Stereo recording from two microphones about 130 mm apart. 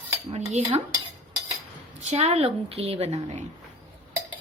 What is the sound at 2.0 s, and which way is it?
A woman's voice, 55° right (ahead or behind).